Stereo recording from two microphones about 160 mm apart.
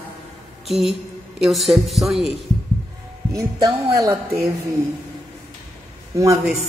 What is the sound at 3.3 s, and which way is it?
Speech, 25° right (ahead or behind).